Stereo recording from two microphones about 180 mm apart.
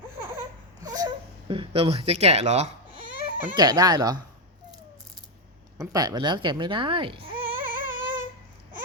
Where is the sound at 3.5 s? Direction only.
20° right (ahead or behind).